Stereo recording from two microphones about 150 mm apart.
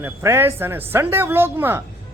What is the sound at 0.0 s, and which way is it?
Speech, 15° right (ahead or behind).